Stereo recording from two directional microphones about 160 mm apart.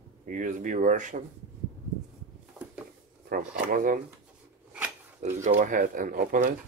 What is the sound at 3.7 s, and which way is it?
Speech, 55° right (ahead or behind).